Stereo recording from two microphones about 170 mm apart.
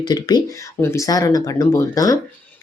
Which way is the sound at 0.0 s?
25° left (ahead or behind).